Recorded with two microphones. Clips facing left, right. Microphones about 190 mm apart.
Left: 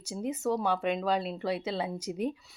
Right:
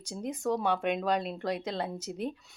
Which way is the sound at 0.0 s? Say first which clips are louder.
Left 2 dB; 5° left (ahead or behind).